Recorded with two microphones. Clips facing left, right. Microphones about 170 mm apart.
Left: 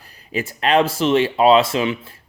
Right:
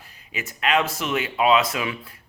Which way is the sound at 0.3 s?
35° left (ahead or behind).